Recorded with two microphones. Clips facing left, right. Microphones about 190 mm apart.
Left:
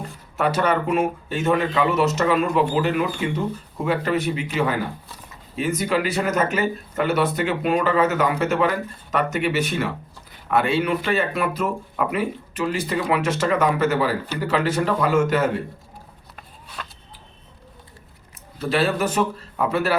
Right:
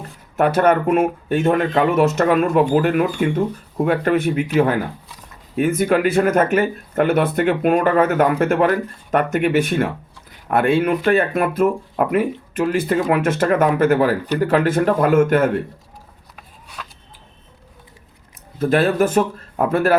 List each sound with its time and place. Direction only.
0.3 s speech: 55° right (ahead or behind)
16.8 s a sound: 5° right (ahead or behind)
18.6 s speech: 50° right (ahead or behind)